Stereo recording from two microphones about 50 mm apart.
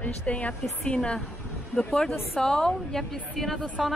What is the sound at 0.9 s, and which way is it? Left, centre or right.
Speech, centre.